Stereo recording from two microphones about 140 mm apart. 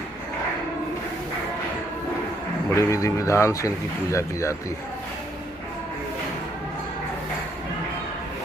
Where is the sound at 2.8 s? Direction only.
20° left (ahead or behind).